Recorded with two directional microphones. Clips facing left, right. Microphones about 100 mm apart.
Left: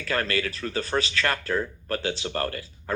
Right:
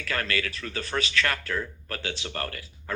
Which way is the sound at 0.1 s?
35° left (ahead or behind).